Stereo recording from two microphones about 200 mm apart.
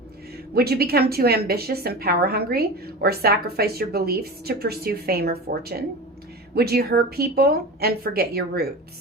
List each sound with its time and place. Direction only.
0.5 s a woman's voice: 50° right (ahead or behind)